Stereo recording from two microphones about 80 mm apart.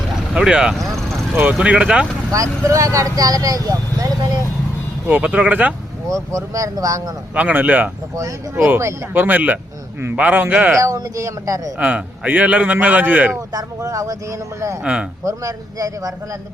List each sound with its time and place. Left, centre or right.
0.1 s speech: centre
1.4 s speech: centre
2.3 s speech: right
5.0 s a man's voice: centre
6.3 s speech: right
7.3 s a man's voice: centre
9.1 s a man's voice: right
10.8 s speech: right
11.8 s a man's voice: centre
13.5 s speech: right